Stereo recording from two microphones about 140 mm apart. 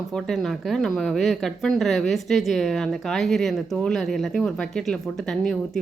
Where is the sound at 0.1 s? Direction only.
Centre (ahead or behind).